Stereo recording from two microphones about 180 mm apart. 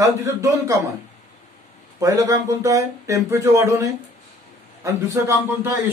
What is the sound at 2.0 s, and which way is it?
Speech, 20° right (ahead or behind).